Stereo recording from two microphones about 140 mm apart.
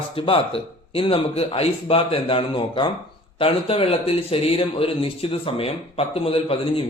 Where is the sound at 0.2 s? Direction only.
40° left (ahead or behind).